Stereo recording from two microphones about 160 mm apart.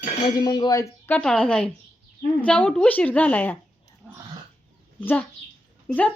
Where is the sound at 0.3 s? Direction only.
25° left (ahead or behind); by 3.6 s 10° left (ahead or behind).